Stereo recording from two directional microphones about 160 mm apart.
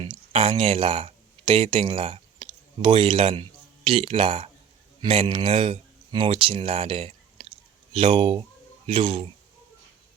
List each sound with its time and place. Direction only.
0.0 s speech: 35° right (ahead or behind)